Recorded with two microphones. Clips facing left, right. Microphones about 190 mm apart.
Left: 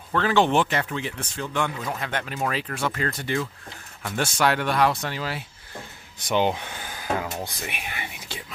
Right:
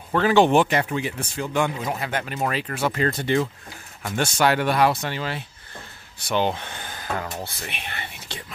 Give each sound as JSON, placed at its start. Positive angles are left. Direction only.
{"t": 0.1, "sound": "speech", "side_deg": -10}
{"t": 2.0, "sound": "speech", "side_deg": -5}
{"t": 2.9, "sound": "speech", "side_deg": -25}
{"t": 4.2, "sound": "speech", "side_deg": 0}
{"t": 6.1, "sound": "speech", "side_deg": 15}